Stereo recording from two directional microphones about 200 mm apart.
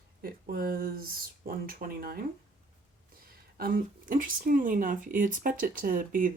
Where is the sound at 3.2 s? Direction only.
45° right (ahead or behind).